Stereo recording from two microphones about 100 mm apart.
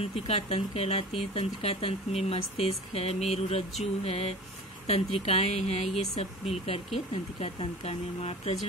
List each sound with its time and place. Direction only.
0.0 s speech: 90° left
4.0 s a sound: 90° left
4.8 s speech: 90° left